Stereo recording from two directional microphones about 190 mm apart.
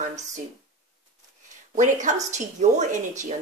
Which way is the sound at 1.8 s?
40° right (ahead or behind).